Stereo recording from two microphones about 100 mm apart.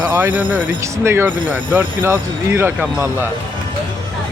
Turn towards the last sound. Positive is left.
turn(degrees=-20)  # may be behind; listen again after turning